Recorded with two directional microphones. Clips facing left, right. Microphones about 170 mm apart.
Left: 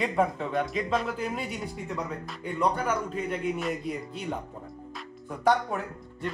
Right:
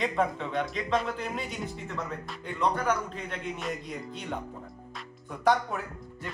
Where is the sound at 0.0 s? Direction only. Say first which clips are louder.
Left 2 dB; 5° left (ahead or behind).